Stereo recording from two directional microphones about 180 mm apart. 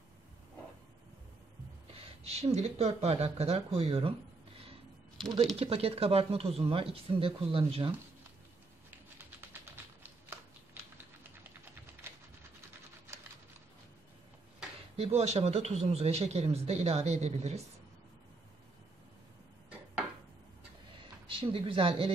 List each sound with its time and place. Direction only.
2.2 s speech: 35° right (ahead or behind)
5.6 s speech: 35° right (ahead or behind)
9.2 s a sound: 10° right (ahead or behind)
10.7 s typing: 10° right (ahead or behind)
15.0 s speech: 35° right (ahead or behind)
21.0 s speech: 30° right (ahead or behind)